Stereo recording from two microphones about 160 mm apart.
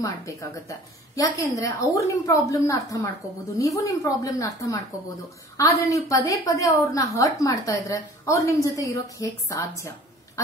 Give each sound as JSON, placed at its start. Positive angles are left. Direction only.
{"t": 0.0, "sound": "a woman's voice", "side_deg": 20}